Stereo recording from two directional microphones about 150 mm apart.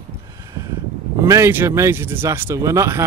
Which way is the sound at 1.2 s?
20° right (ahead or behind).